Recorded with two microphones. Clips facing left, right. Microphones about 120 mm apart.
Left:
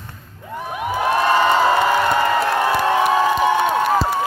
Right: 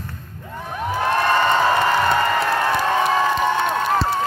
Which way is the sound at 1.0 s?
15° left (ahead or behind).